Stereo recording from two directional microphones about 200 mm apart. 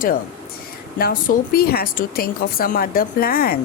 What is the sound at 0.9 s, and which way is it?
Speech, 50° left (ahead or behind).